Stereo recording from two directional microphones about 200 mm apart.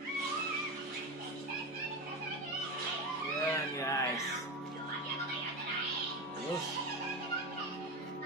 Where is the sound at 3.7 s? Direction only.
15° left (ahead or behind).